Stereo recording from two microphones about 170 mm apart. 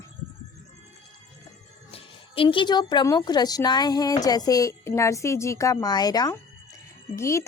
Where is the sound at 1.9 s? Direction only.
35° left (ahead or behind).